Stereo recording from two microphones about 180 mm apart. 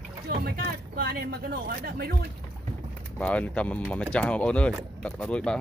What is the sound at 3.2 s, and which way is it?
Speech, 5° left (ahead or behind).